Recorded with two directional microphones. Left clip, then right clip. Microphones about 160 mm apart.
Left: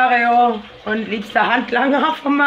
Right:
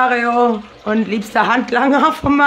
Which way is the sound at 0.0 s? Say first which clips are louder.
Left 1 dB; 30° right (ahead or behind).